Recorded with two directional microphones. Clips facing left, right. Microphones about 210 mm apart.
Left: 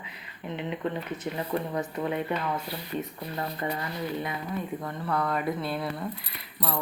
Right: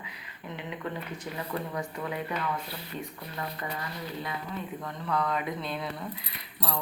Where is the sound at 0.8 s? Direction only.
25° left (ahead or behind).